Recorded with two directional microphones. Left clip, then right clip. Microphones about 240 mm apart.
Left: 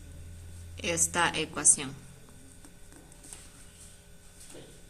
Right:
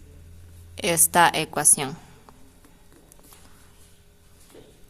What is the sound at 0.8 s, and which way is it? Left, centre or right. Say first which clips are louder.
A woman's voice: right 9 dB; right.